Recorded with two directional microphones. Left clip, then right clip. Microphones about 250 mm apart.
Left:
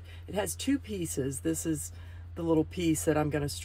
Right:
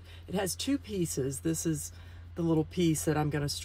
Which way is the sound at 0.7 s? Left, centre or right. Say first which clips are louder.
Even; centre.